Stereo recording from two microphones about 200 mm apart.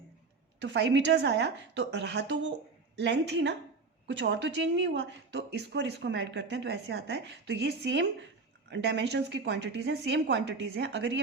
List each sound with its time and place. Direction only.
0.6 s speech: 60° right (ahead or behind)